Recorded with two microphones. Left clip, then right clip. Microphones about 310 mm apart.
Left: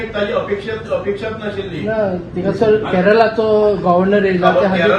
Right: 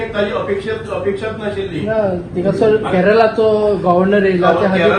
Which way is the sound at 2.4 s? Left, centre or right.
Left.